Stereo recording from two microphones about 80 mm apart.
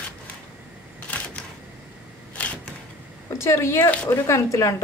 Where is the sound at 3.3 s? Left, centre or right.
Left.